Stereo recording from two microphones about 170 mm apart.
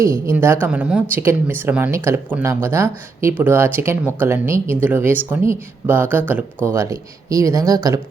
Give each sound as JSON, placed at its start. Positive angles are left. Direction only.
{"t": 0.0, "sound": "speech", "side_deg": -15}